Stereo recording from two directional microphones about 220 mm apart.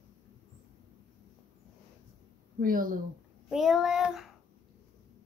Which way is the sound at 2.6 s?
40° right (ahead or behind).